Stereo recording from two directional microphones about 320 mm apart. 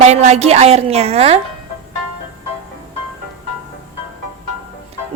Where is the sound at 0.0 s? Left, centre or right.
Right.